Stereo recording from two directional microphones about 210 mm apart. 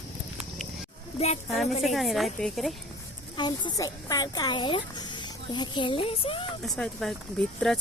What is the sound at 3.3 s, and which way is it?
Speech, 20° left (ahead or behind).